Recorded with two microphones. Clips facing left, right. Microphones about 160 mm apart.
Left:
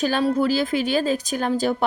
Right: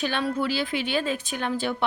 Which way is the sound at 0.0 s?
35° left (ahead or behind).